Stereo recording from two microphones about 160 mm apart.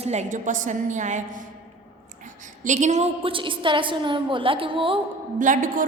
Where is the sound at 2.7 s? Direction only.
45° right (ahead or behind).